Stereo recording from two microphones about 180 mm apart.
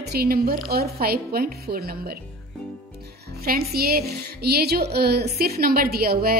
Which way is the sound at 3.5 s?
60° right (ahead or behind).